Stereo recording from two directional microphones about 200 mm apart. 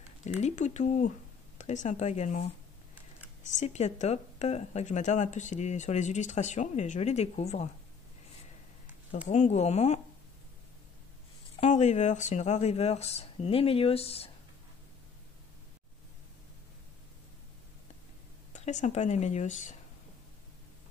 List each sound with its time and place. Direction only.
0.2 s speech: 35° left (ahead or behind)
3.4 s speech: 35° left (ahead or behind)
9.3 s speech: 35° left (ahead or behind)
11.6 s speech: 35° left (ahead or behind)
18.5 s speech: 35° left (ahead or behind)